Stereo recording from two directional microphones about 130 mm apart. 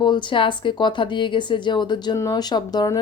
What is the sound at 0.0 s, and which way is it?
A woman's voice, 35° left (ahead or behind).